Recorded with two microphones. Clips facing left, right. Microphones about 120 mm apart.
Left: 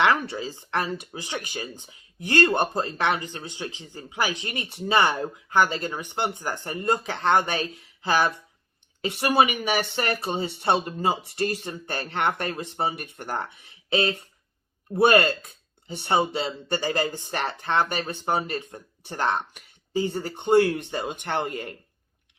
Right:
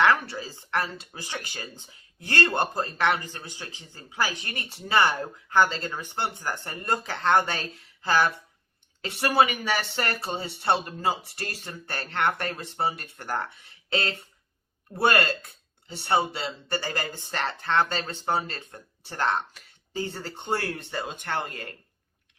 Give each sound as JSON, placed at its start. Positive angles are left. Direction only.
{"t": 0.0, "sound": "speech", "side_deg": 20}